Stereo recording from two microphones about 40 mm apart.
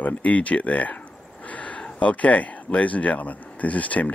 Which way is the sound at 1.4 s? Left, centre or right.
Left.